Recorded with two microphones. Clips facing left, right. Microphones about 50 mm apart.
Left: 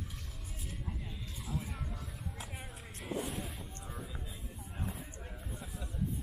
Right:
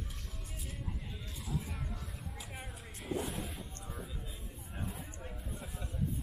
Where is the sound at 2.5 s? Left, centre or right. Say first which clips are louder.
Even; centre.